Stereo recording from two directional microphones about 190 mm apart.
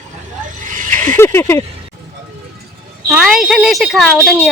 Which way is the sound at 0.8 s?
40° right (ahead or behind).